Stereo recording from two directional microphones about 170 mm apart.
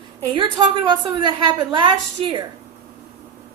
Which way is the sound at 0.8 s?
25° right (ahead or behind).